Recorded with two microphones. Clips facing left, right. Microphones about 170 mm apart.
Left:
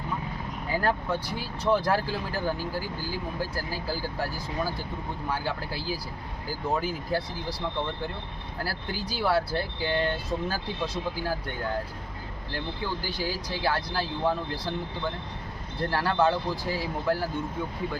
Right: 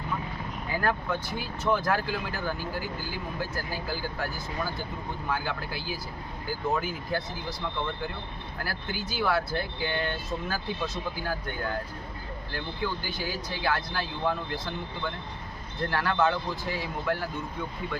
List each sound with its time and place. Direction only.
0.7 s speech: 30° left (ahead or behind)
8.5 s speech: 35° left (ahead or behind)
15.8 s speech: 30° left (ahead or behind)